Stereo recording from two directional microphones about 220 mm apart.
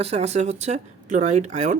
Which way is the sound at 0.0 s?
30° right (ahead or behind).